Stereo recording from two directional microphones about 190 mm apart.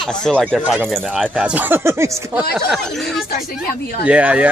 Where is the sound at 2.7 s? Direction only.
Centre (ahead or behind).